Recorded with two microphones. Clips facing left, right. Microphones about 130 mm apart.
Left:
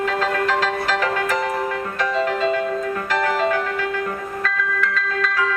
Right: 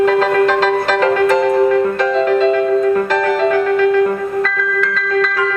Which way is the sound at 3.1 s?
65° right (ahead or behind).